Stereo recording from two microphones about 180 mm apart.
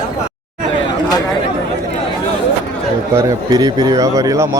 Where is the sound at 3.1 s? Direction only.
20° right (ahead or behind).